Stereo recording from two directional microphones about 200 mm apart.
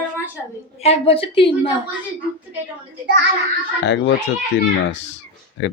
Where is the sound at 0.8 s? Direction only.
30° left (ahead or behind).